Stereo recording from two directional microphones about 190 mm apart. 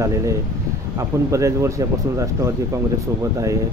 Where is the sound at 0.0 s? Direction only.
15° right (ahead or behind).